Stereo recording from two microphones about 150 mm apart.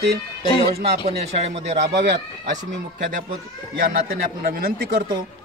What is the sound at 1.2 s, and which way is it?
Speech, 45° right (ahead or behind).